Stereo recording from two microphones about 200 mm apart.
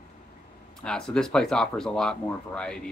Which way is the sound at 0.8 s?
5° left (ahead or behind).